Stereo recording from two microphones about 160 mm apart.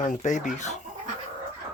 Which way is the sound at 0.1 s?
50° left (ahead or behind).